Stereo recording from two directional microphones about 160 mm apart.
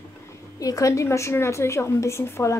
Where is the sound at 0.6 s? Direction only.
20° left (ahead or behind).